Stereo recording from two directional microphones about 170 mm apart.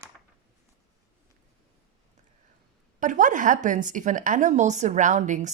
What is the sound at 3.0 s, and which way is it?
A woman's voice, 50° right (ahead or behind).